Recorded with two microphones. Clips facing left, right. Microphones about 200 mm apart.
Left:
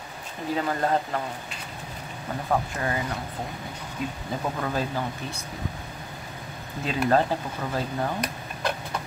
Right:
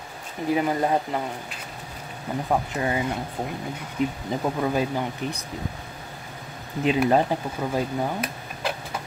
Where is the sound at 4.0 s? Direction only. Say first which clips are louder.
Right 5 dB; 20° right (ahead or behind).